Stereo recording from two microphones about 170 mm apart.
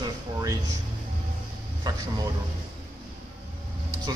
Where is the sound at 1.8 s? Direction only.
25° right (ahead or behind).